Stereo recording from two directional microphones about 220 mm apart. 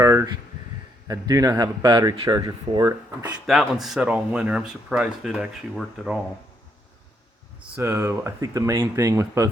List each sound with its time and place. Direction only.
0.0 s a sound: 15° right (ahead or behind)
1.0 s speech: 15° right (ahead or behind)
3.4 s speech: centre (ahead or behind)
7.8 s speech: 10° right (ahead or behind)